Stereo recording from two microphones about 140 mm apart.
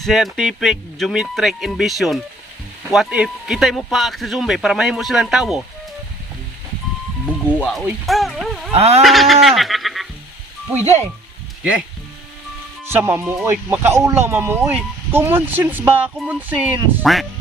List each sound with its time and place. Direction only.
0.0 s speech: centre (ahead or behind)
7.3 s music: 5° left (ahead or behind)
8.0 s speech: centre (ahead or behind)
8.7 s a sound: 45° right (ahead or behind)
9.0 s goat: centre (ahead or behind)
12.8 s speech: 15° right (ahead or behind)